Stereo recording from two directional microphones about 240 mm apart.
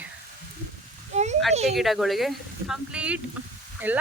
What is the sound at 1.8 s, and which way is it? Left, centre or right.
Speech, centre.